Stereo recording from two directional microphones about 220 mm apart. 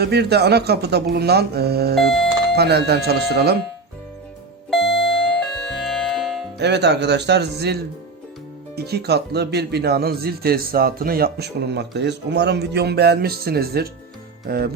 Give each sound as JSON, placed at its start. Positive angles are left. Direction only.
{"t": 0.0, "sound": "speech", "side_deg": -50}
{"t": 2.0, "sound": "speech", "side_deg": 0}
{"t": 2.6, "sound": "speech", "side_deg": -50}
{"t": 4.7, "sound": "doorbell", "side_deg": 0}
{"t": 6.6, "sound": "speech", "side_deg": -50}
{"t": 14.4, "sound": "music", "side_deg": -45}